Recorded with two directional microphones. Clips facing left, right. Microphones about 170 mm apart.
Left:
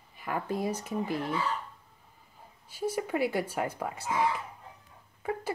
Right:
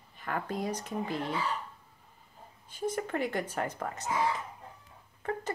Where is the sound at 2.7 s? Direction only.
10° left (ahead or behind).